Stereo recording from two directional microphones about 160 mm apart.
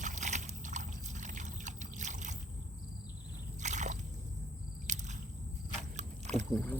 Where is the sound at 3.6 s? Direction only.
50° right (ahead or behind).